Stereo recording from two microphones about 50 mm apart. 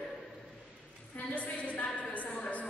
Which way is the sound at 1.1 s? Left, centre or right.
Left.